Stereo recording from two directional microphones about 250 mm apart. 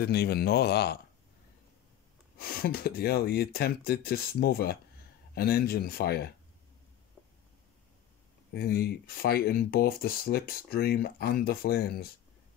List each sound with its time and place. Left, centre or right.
0.0 s speech: left
2.3 s speech: left
8.5 s speech: left